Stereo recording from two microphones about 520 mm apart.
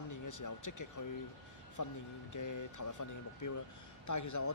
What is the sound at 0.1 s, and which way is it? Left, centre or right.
Speech, left.